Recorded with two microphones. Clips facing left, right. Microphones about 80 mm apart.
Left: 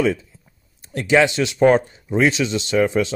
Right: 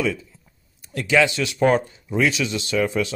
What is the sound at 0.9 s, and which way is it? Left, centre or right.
Speech, left.